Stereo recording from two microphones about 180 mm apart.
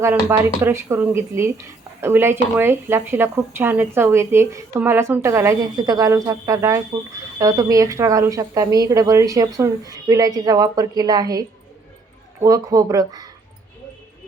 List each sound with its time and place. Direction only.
0.0 s a woman's voice: 15° right (ahead or behind)